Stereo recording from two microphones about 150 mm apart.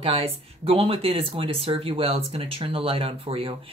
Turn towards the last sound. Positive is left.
turn(degrees=-35)  # may be behind; listen again after turning